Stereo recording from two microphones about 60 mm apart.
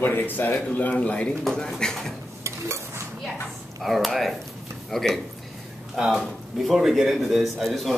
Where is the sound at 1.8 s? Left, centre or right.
Centre.